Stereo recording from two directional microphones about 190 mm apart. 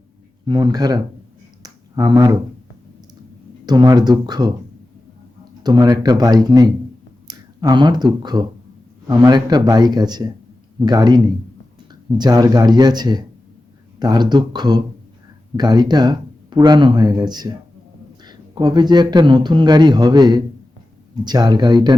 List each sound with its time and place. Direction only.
0.4 s speech: 20° right (ahead or behind)
1.6 s finger snapping: 20° right (ahead or behind)
3.7 s speech: 20° right (ahead or behind)
5.6 s speech: 20° right (ahead or behind)